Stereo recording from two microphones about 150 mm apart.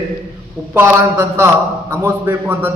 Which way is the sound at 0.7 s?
15° right (ahead or behind).